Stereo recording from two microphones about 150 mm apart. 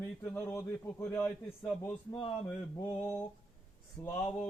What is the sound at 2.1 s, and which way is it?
Speech, 40° left (ahead or behind).